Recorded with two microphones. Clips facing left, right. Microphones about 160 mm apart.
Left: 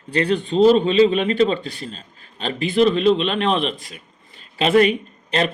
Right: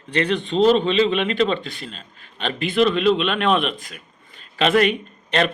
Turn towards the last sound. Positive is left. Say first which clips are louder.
# right 1 dB
turn(degrees=35)  # may be behind; listen again after turning